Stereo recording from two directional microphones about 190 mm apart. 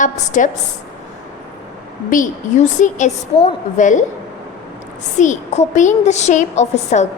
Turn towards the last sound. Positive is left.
turn(degrees=35)  # may be behind; listen again after turning